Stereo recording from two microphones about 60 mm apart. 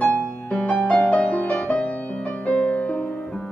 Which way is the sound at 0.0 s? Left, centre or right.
Left.